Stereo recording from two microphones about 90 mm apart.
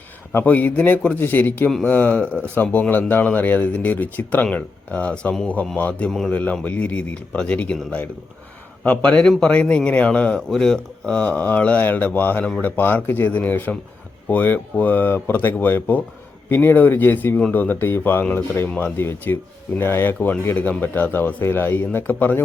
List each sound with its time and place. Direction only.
0.3 s speech: 20° left (ahead or behind)
6.1 s speech: 5° left (ahead or behind)
6.3 s speech: 15° left (ahead or behind)
8.8 s speech: 15° left (ahead or behind)
20.1 s speech: 10° left (ahead or behind)
20.4 s speech: 20° left (ahead or behind)